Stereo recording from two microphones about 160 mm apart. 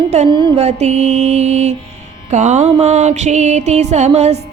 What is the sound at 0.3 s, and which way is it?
Music, 30° right (ahead or behind).